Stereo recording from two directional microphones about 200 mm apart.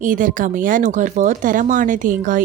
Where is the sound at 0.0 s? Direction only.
40° right (ahead or behind).